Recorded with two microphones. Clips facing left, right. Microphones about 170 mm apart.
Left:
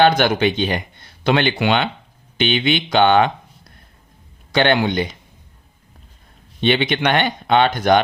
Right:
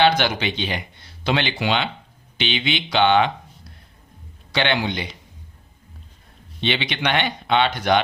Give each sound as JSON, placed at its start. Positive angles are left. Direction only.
{"t": 0.0, "sound": "speech", "side_deg": 50}
{"t": 4.5, "sound": "speech", "side_deg": 50}
{"t": 6.6, "sound": "speech", "side_deg": 50}